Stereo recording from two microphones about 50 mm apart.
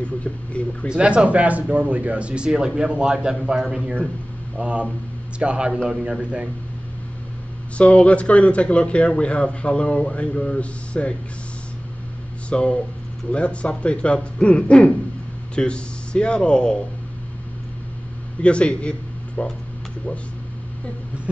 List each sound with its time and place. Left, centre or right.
0.0 s speech: left
0.8 s a man's voice: centre
4.6 s speech: right
5.9 s a man's voice: centre
7.7 s speech: left
12.4 s speech: left
18.4 s a man's voice: left